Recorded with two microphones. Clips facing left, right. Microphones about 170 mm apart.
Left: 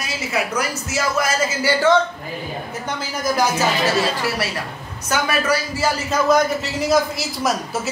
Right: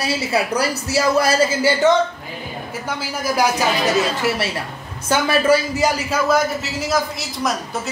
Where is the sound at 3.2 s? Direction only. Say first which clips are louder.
Even; 10° right (ahead or behind).